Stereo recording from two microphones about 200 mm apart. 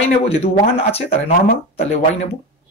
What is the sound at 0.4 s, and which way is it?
Speech, 30° left (ahead or behind).